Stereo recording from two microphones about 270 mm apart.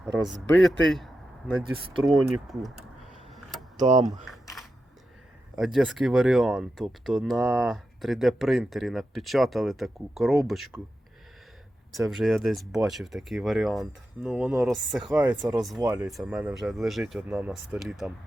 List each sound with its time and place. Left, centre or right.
0.0 s speech: centre
3.8 s speech: right
4.3 s a sound: centre
5.5 s speech: centre
12.1 s speech: centre